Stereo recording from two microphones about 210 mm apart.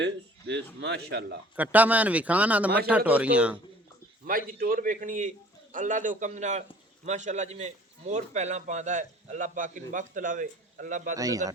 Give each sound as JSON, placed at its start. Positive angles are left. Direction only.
{"t": 0.0, "sound": "speech", "side_deg": -55}
{"t": 1.5, "sound": "a man's voice", "side_deg": -5}
{"t": 4.3, "sound": "a man's voice", "side_deg": -40}
{"t": 11.2, "sound": "a man's voice", "side_deg": -15}